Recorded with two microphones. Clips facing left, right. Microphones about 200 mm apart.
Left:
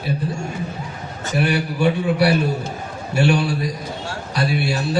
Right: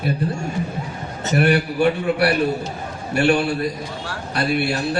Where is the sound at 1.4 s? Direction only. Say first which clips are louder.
Right 3 dB; 60° right (ahead or behind).